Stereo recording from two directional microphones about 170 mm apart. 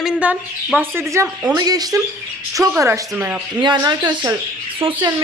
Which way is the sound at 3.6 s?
25° right (ahead or behind).